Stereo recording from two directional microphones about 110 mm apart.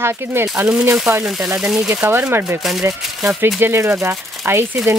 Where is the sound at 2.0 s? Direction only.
25° right (ahead or behind).